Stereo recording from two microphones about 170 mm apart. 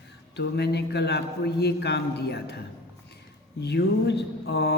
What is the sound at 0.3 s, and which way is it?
A man's voice, 75° left (ahead or behind).